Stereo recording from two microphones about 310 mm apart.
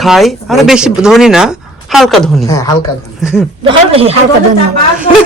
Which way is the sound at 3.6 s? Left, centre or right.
Centre.